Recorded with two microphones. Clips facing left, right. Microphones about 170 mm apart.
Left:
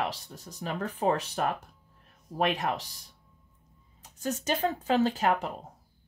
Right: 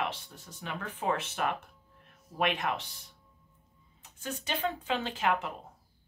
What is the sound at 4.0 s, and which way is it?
Speech, 40° left (ahead or behind).